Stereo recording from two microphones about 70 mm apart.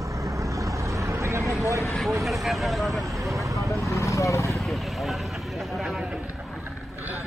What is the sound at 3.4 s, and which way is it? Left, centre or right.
Vehicle, right.